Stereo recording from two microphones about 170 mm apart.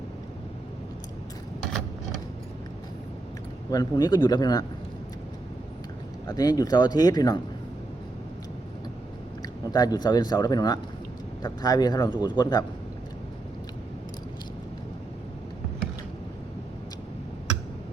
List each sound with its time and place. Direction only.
3.7 s speech: 25° left (ahead or behind)
6.2 s speech: 20° left (ahead or behind)
9.7 s speech: 25° left (ahead or behind)